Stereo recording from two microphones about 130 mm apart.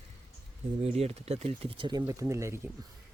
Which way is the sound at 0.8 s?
55° right (ahead or behind).